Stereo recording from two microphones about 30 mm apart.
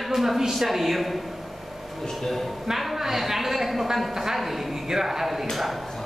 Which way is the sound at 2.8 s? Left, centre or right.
Centre.